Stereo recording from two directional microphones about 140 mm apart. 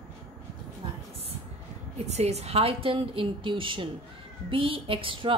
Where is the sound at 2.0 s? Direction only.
50° right (ahead or behind).